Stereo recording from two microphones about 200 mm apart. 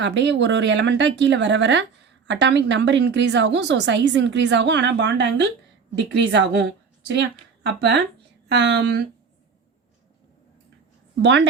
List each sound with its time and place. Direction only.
0.0 s a woman's voice: 60° right (ahead or behind)
11.2 s a woman's voice: 60° right (ahead or behind)